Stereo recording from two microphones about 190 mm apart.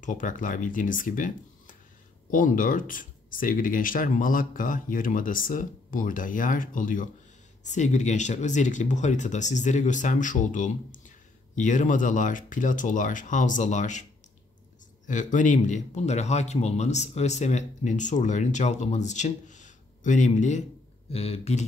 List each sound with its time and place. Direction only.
0.0 s speech: 40° left (ahead or behind)
15.0 s speech: 40° left (ahead or behind)